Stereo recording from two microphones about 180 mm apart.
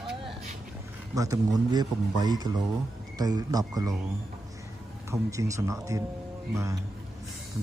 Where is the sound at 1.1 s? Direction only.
20° right (ahead or behind).